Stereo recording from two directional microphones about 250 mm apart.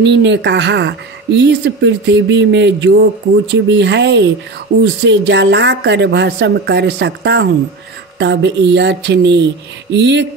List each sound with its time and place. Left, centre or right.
0.0 s speech: right